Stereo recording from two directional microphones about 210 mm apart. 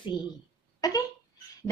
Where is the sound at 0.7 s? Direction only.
15° left (ahead or behind).